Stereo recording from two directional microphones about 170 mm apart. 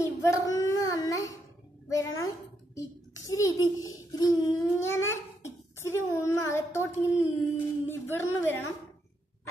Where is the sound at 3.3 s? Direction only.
20° left (ahead or behind).